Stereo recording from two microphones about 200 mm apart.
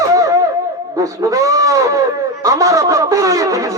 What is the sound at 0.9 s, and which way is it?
Speech, 15° right (ahead or behind).